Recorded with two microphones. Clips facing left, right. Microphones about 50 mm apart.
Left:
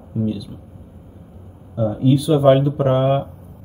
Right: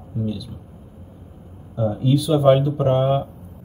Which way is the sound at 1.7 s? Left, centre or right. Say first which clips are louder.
Left 3 dB; centre.